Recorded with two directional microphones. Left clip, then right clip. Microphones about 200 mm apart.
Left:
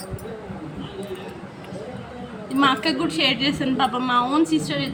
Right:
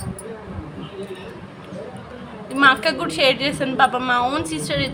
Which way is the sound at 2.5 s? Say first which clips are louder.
Right 4 dB; 65° right (ahead or behind).